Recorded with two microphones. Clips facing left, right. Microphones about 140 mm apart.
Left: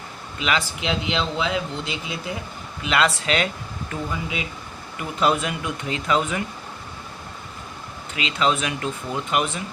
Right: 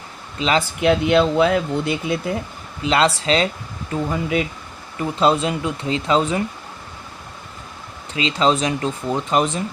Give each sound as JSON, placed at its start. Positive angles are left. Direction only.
{"t": 0.3, "sound": "speech", "side_deg": -30}
{"t": 0.8, "sound": "speech", "side_deg": -55}
{"t": 2.8, "sound": "speech", "side_deg": -30}
{"t": 4.1, "sound": "speech", "side_deg": -50}
{"t": 4.9, "sound": "speech", "side_deg": -30}
{"t": 8.1, "sound": "speech", "side_deg": -35}